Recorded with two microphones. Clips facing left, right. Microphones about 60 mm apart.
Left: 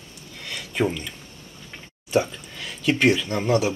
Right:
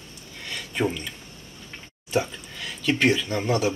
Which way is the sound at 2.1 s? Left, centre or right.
Centre.